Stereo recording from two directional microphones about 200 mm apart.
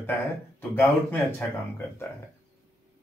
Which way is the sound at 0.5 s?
10° left (ahead or behind).